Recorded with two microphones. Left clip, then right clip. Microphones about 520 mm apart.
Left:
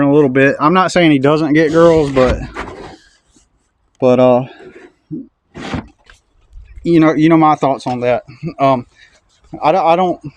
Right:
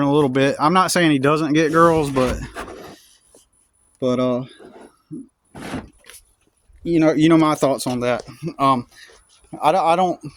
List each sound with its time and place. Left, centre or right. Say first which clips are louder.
0.0 s speech: left 7 dB; right
4.0 s speech: left 11 dB; right
6.8 s speech: left 5 dB; right